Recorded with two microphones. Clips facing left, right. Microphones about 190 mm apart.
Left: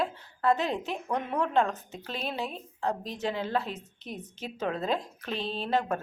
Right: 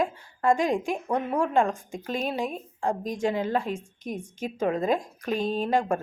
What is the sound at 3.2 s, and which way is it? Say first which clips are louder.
Speech: right 5 dB; 45° right (ahead or behind).